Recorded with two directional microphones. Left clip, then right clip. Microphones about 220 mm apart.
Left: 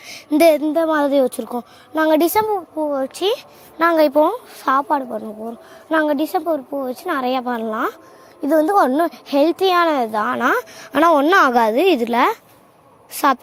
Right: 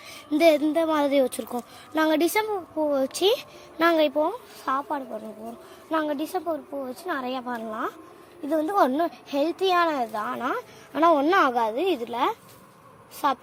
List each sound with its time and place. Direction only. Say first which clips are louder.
0.0 s a sound: left 6 dB; 35° left (ahead or behind)
0.6 s speech: left 6 dB; 25° left (ahead or behind)
2.9 s a woman's voice: left 2 dB; 5° left (ahead or behind)
4.1 s speech: left 10 dB; 40° left (ahead or behind)